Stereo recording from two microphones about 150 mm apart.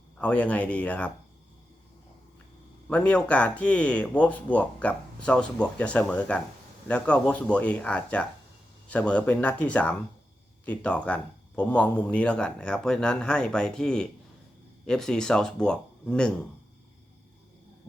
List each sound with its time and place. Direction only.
0.2 s speech: 10° left (ahead or behind)
2.9 s speech: 10° left (ahead or behind)